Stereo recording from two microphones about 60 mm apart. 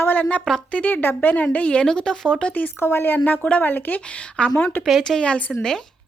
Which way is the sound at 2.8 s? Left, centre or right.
Left.